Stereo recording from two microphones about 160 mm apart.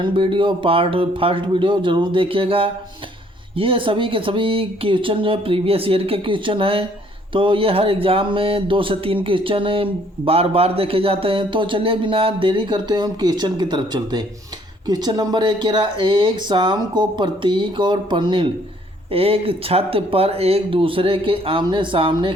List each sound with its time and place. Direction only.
0.0 s speech: 35° right (ahead or behind)